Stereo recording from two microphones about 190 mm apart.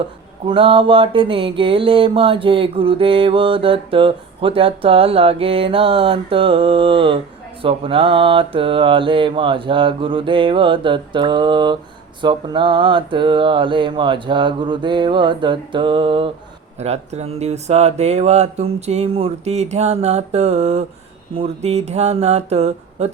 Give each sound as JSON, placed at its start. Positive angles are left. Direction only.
{"t": 0.4, "sound": "mantra", "side_deg": -30}
{"t": 16.8, "sound": "speech", "side_deg": -35}